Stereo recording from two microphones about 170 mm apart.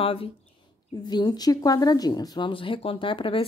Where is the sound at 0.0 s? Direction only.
35° left (ahead or behind).